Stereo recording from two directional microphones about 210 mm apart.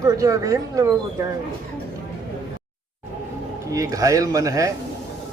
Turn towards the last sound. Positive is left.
turn(degrees=-15)  # may be behind; listen again after turning